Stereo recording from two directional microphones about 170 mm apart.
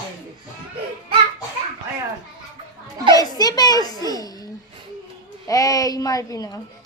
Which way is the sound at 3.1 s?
20° left (ahead or behind).